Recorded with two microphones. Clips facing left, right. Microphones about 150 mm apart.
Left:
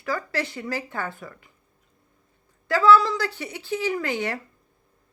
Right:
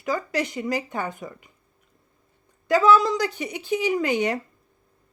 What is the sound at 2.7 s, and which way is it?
A woman's voice, 20° right (ahead or behind).